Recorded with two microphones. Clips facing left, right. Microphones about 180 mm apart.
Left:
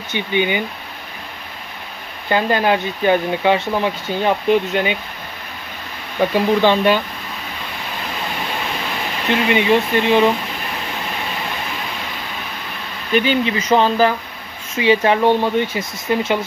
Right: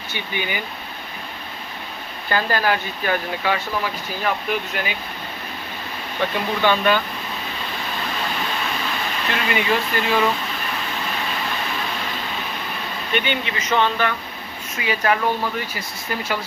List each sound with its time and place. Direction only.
0.1 s speech: 20° left (ahead or behind)
2.2 s speech: 20° left (ahead or behind)
6.3 s speech: 30° left (ahead or behind)
9.3 s speech: 20° left (ahead or behind)
13.1 s speech: 35° left (ahead or behind)